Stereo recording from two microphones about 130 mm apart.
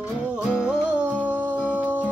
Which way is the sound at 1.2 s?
10° right (ahead or behind).